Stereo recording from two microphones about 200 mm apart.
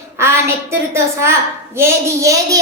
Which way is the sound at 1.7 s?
15° right (ahead or behind).